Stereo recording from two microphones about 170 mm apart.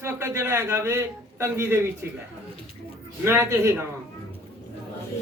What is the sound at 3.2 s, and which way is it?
Speech, 15° right (ahead or behind).